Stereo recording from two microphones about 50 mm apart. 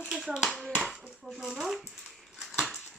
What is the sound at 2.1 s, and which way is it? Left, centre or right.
Dog, centre.